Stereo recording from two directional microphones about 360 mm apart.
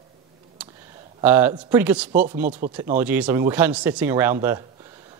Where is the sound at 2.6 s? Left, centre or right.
Right.